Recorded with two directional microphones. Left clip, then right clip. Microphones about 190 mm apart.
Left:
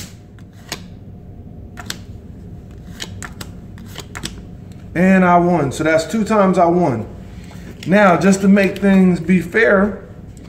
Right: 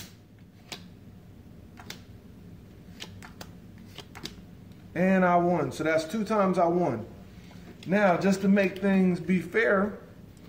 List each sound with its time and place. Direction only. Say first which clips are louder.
4.9 s a man's voice: left 10 dB; 5° left (ahead or behind)
7.8 s a man's voice: left 12 dB; 10° left (ahead or behind)